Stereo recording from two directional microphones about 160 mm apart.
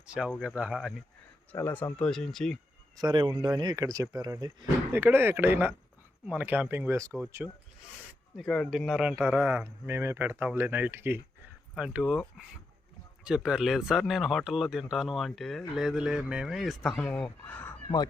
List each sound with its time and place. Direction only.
0.1 s speech: 5° right (ahead or behind)
1.5 s speech: 10° left (ahead or behind)
3.0 s speech: 25° right (ahead or behind)
4.9 s speech: 15° right (ahead or behind)
8.4 s speech: 5° left (ahead or behind)
13.2 s speech: 5° right (ahead or behind)